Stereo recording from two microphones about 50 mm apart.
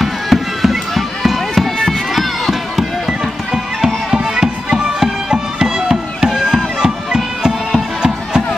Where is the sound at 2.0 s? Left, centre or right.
Centre.